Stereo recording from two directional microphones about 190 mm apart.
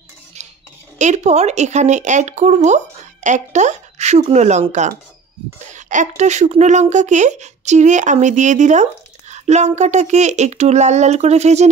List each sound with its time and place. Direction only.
0.3 s cutlery: 35° right (ahead or behind)
0.9 s speech: 40° right (ahead or behind)